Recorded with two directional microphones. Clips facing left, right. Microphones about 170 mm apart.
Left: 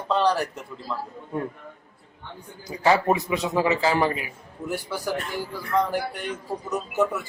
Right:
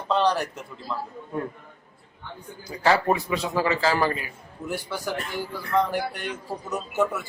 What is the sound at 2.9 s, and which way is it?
A man's voice, 20° left (ahead or behind).